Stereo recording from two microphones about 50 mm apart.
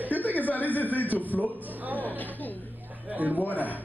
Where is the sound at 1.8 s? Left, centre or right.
Right.